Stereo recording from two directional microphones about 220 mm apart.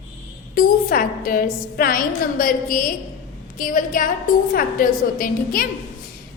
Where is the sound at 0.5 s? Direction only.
40° left (ahead or behind).